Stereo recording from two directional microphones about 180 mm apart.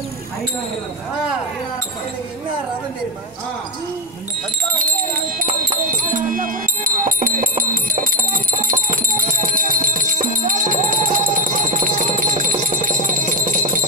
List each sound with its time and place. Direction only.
5.9 s music: 50° right (ahead or behind)